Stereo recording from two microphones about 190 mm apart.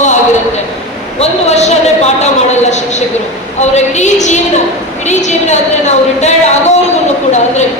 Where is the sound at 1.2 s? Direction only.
35° left (ahead or behind).